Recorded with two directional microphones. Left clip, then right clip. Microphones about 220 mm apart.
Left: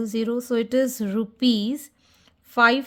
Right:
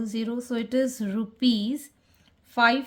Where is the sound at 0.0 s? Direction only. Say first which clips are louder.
Left 6 dB; 35° left (ahead or behind).